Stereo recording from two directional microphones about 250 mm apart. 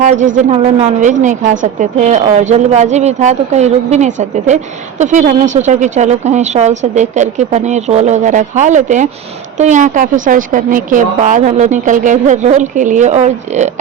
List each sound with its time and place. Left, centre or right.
0.0 s a woman's voice: right